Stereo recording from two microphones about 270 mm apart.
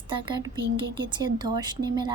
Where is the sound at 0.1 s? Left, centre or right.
Centre.